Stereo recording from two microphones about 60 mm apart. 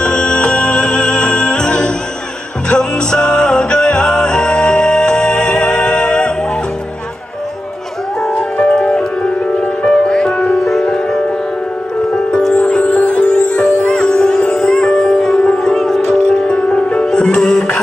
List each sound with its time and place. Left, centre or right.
0.0 s music: centre
8.4 s music: left; by 11.1 s centre
12.6 s music: centre
15.7 s music: centre